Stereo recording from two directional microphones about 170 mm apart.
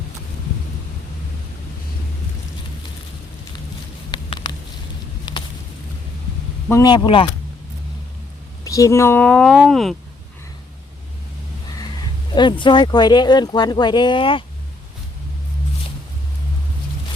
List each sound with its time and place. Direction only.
4.1 s a sound: 25° left (ahead or behind)
6.7 s speech: 20° left (ahead or behind)
8.6 s speech: 20° left (ahead or behind); by 9.9 s centre (ahead or behind)
12.3 s speech: 25° left (ahead or behind)